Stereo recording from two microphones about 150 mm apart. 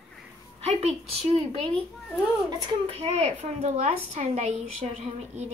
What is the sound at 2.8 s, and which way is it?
A woman's voice, 40° right (ahead or behind).